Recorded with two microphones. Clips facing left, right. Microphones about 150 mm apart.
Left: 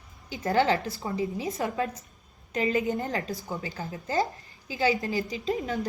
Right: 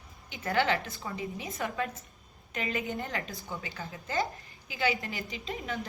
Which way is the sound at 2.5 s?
40° left (ahead or behind).